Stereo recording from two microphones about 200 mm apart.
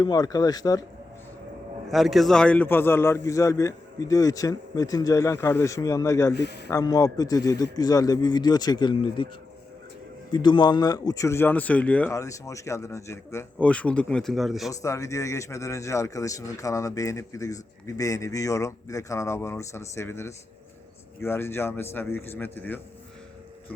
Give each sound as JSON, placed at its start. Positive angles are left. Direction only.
{"t": 0.0, "sound": "a man's voice", "side_deg": 20}
{"t": 1.9, "sound": "a man's voice", "side_deg": 0}
{"t": 6.3, "sound": "a man's voice", "side_deg": 55}
{"t": 6.7, "sound": "a man's voice", "side_deg": 15}
{"t": 10.3, "sound": "a man's voice", "side_deg": 25}
{"t": 14.7, "sound": "a man's voice", "side_deg": 15}